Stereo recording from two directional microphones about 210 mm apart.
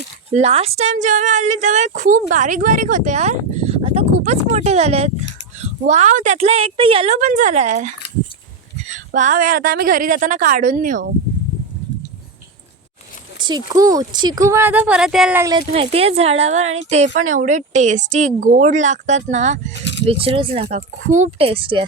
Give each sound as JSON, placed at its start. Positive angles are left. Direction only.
{"t": 0.3, "sound": "a woman's voice", "side_deg": -30}
{"t": 9.1, "sound": "a woman's voice", "side_deg": -35}
{"t": 13.7, "sound": "speech", "side_deg": -15}
{"t": 15.7, "sound": "a woman's voice", "side_deg": -30}
{"t": 19.8, "sound": "a sound", "side_deg": 55}
{"t": 20.1, "sound": "speech", "side_deg": -25}